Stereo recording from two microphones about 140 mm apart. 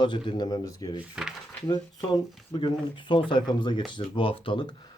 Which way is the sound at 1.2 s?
5° right (ahead or behind).